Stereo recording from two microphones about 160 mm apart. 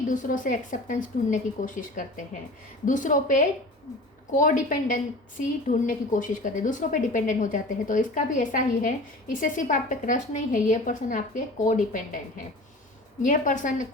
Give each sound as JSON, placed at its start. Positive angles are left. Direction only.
{"t": 0.1, "sound": "a woman's voice", "side_deg": 55}
{"t": 13.2, "sound": "a woman's voice", "side_deg": 55}